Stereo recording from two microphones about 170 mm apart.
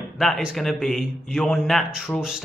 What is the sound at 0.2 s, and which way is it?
Speech, centre (ahead or behind).